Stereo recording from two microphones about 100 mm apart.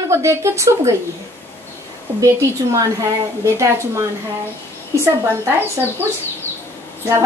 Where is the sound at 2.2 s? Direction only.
30° right (ahead or behind).